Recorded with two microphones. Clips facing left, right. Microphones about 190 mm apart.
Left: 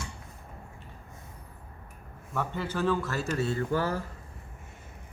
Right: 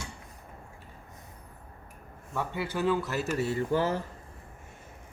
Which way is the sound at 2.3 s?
15° right (ahead or behind).